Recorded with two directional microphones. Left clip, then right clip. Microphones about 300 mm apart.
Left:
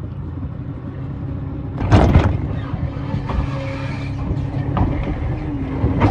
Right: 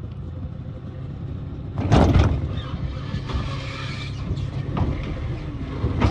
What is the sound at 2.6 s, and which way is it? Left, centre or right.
Vehicle, centre.